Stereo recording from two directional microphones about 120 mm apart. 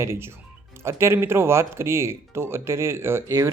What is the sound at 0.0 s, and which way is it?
Speech, 20° right (ahead or behind).